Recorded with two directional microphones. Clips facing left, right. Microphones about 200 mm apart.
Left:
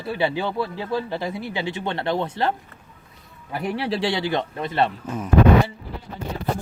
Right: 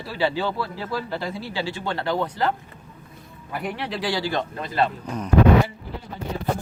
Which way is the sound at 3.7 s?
30° left (ahead or behind).